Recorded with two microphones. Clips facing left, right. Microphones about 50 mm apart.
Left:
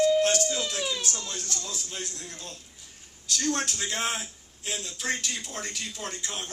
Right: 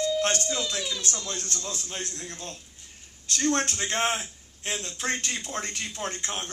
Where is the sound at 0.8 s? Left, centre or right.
Left.